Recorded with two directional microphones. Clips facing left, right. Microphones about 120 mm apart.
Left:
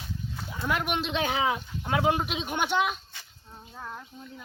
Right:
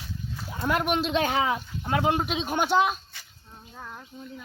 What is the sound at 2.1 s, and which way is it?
Speech, 40° right (ahead or behind).